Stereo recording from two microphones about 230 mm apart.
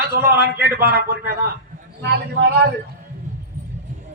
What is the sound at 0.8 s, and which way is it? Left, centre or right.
Speech, right.